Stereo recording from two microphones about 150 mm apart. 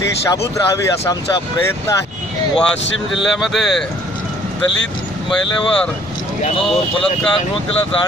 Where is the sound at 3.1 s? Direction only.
Centre (ahead or behind).